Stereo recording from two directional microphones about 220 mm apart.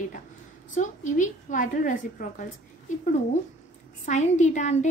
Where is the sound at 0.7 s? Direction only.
35° left (ahead or behind).